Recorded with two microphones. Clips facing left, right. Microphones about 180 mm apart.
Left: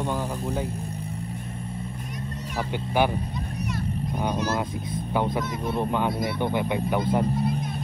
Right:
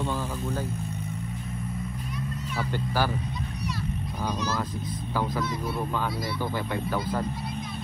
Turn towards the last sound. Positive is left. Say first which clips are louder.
# left 5 dB
turn(degrees=20)  # may be behind; listen again after turning